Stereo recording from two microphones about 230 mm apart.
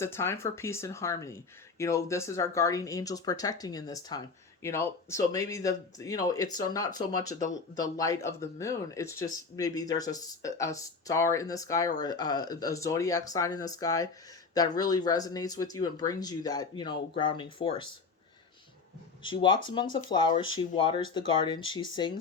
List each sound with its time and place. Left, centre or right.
0.0 s speech: centre
19.2 s speech: left